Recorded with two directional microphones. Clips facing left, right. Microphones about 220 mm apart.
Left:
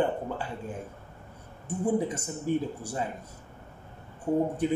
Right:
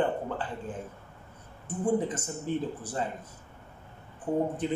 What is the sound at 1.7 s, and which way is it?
Speech, 10° left (ahead or behind).